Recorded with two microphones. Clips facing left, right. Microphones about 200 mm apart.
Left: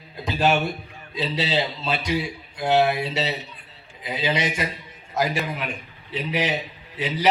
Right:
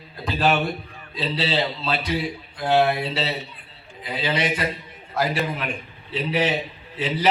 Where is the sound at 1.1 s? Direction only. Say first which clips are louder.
Even; 20° left (ahead or behind).